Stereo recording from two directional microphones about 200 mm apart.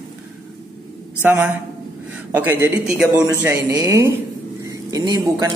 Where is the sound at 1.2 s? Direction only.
5° right (ahead or behind).